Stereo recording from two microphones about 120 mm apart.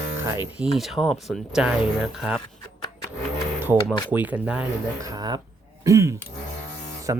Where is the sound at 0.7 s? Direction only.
Centre (ahead or behind).